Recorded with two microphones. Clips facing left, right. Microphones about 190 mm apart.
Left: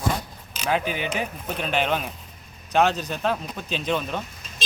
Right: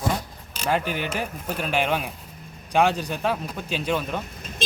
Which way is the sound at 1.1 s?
5° right (ahead or behind).